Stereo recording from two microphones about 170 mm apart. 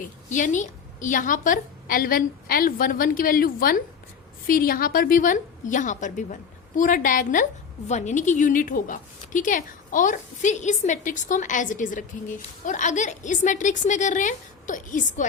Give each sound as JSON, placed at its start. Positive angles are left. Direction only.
{"t": 0.0, "sound": "a woman's voice", "side_deg": 50}